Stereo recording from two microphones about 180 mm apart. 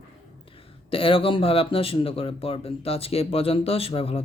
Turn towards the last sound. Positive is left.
turn(degrees=30)  # may be behind; listen again after turning